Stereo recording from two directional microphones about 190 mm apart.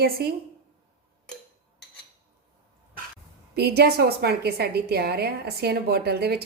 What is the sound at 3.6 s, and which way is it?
A woman's voice, 55° right (ahead or behind).